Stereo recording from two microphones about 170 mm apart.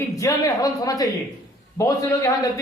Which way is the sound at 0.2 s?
20° left (ahead or behind).